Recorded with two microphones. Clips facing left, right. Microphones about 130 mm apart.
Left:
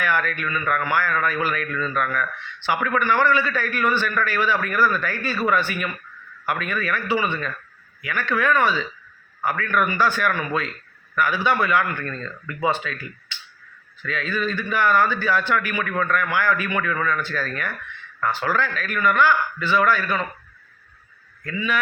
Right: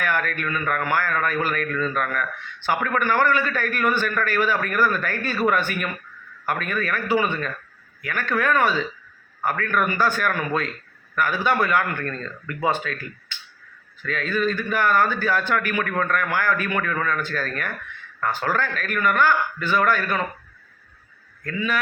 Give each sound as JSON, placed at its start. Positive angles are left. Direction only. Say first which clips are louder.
{"t": 0.0, "sound": "a man's voice", "louder": "left 1 dB", "side_deg": -45}
{"t": 21.4, "sound": "a man's voice", "louder": "even", "side_deg": -45}